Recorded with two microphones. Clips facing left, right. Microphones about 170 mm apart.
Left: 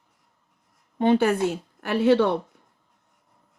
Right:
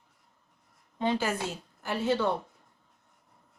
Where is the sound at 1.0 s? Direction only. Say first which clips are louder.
Left 9 dB; 60° left (ahead or behind).